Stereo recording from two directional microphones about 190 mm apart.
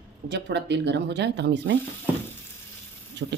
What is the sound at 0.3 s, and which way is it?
Speech, 65° right (ahead or behind).